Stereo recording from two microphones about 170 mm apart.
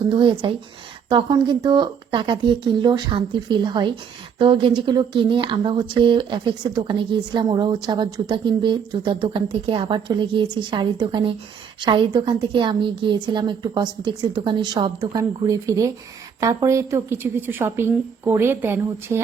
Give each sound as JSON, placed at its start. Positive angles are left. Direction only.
{"t": 0.1, "sound": "a woman's voice", "side_deg": -30}